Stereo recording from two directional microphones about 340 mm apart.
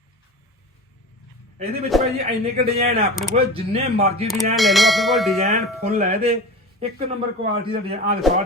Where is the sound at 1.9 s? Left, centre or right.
Centre.